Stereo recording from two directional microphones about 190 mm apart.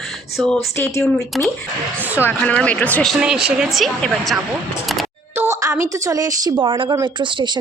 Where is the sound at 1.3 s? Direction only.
Centre (ahead or behind).